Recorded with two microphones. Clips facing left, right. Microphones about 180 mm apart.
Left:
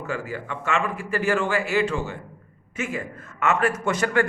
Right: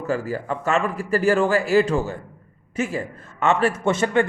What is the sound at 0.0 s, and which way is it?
A man's voice, 35° right (ahead or behind).